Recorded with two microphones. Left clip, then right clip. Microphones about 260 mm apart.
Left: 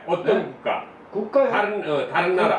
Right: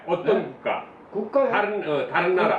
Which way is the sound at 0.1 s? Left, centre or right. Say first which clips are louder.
Left 1 dB; centre.